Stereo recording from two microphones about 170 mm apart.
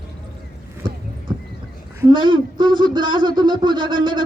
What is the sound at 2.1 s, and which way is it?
Speech, 30° right (ahead or behind).